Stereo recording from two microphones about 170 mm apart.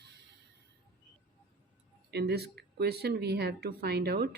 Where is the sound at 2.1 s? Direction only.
75° right (ahead or behind).